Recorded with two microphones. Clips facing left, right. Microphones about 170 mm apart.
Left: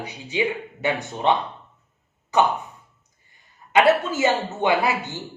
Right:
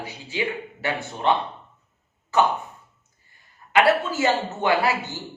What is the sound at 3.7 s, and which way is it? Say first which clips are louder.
A woman's voice: left 2 dB; 20° left (ahead or behind).